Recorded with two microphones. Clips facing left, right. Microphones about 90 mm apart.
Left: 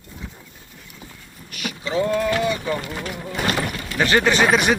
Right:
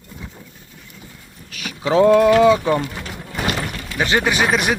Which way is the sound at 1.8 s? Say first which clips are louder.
Right 9 dB; 90° right.